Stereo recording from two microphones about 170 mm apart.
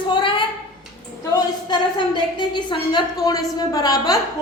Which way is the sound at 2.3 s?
25° left (ahead or behind).